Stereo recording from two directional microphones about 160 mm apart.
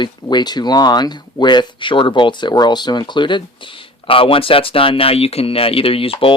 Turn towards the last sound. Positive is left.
turn(degrees=35)  # may be behind; listen again after turning